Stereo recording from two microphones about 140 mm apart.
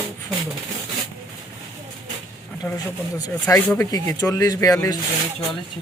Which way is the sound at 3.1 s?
25° left (ahead or behind).